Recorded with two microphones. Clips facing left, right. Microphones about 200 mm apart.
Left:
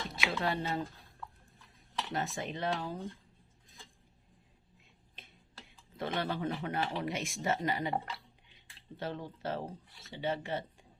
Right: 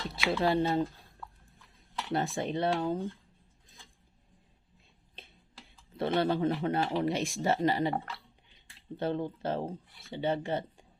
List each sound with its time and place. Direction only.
0.1 s speech: 30° right (ahead or behind)
2.1 s speech: 30° right (ahead or behind)
6.0 s speech: 30° right (ahead or behind)
9.0 s speech: 30° right (ahead or behind)